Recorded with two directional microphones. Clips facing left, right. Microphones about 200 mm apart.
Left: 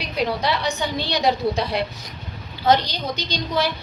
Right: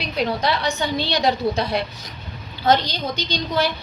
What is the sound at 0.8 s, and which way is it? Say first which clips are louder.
A woman's voice: right 2 dB; 15° left (ahead or behind).